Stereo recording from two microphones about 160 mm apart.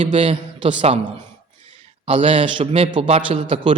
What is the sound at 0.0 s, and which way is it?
Speech, 35° right (ahead or behind).